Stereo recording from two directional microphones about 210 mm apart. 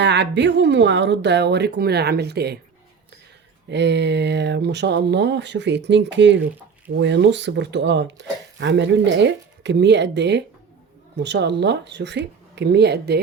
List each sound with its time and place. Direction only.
0.0 s speech: 55° right (ahead or behind)
3.7 s speech: 55° right (ahead or behind)